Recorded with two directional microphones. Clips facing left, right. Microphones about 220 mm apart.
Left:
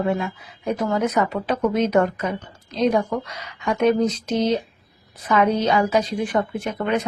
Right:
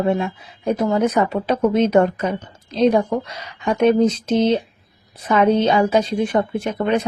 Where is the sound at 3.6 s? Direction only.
30° right (ahead or behind).